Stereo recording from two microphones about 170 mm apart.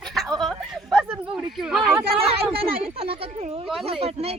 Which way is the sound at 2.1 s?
35° right (ahead or behind).